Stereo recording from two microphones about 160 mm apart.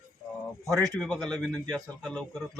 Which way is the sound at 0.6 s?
Centre (ahead or behind).